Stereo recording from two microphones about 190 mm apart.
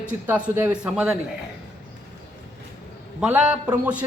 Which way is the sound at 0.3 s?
5° right (ahead or behind).